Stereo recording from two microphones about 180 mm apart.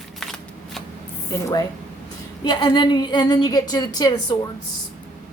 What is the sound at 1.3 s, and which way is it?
A woman's voice, 15° left (ahead or behind).